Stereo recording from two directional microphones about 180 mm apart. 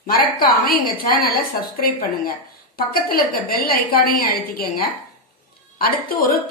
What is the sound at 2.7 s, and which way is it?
A woman's voice, 55° left (ahead or behind).